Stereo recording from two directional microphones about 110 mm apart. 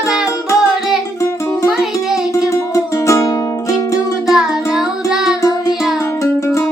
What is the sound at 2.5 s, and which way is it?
Music, 25° left (ahead or behind).